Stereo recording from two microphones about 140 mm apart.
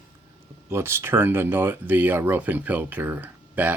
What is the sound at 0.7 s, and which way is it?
Speech, 15° right (ahead or behind).